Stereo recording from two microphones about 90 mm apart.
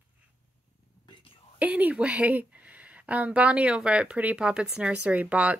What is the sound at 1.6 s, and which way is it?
Speech, 20° right (ahead or behind).